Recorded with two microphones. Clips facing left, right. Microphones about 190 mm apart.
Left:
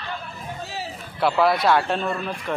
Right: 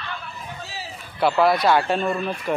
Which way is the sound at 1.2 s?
Centre (ahead or behind).